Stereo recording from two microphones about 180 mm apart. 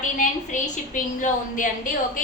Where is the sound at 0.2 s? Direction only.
45° left (ahead or behind).